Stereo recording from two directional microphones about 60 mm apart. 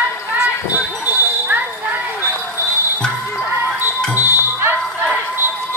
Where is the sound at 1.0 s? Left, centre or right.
Right.